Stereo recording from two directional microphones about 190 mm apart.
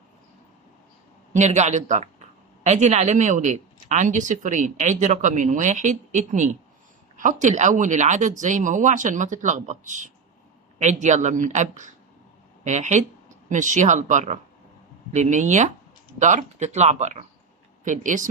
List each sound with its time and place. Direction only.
1.3 s a man's voice: 40° right (ahead or behind)